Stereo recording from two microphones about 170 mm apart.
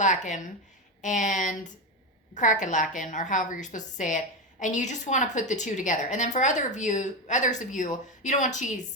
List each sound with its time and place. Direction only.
0.0 s a woman's voice: 45° left (ahead or behind)